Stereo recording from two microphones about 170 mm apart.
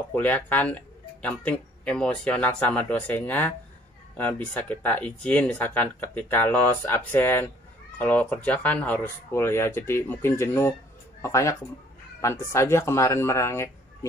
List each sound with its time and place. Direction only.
0.1 s speech: 10° left (ahead or behind)